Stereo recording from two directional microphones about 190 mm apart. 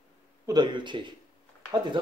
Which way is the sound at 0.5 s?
25° right (ahead or behind).